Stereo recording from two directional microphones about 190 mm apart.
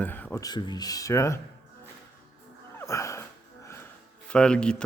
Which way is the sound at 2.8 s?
15° left (ahead or behind).